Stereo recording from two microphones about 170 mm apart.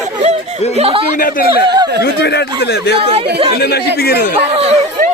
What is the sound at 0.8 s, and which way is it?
Speech, 35° right (ahead or behind).